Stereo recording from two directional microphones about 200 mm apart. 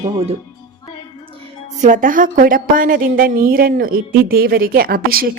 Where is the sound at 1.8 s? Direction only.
40° right (ahead or behind).